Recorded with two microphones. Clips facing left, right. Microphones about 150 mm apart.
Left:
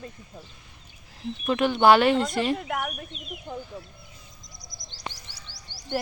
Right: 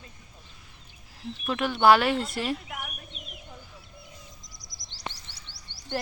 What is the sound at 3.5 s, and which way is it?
Chicken, 75° left (ahead or behind).